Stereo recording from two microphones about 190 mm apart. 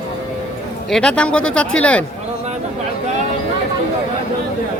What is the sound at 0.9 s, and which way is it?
Speech, 5° left (ahead or behind).